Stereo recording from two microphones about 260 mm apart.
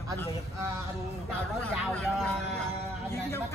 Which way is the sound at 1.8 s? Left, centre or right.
Centre.